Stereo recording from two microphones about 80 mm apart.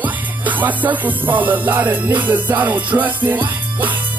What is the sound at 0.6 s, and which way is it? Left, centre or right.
Music, right.